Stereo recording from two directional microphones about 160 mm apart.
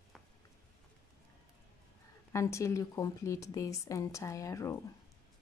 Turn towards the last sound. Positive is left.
turn(degrees=20)  # may be behind; listen again after turning